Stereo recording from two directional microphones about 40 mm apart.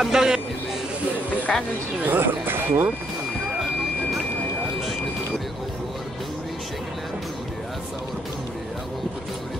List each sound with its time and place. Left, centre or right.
0.0 s a man's voice: centre
1.5 s speech: centre
2.0 s speech: right